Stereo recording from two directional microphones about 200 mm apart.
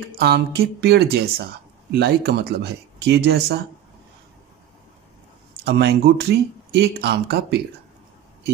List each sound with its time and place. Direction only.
0.2 s speech: 55° right (ahead or behind)
5.7 s speech: 55° right (ahead or behind)